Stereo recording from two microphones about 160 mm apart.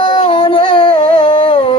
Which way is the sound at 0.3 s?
30° left (ahead or behind).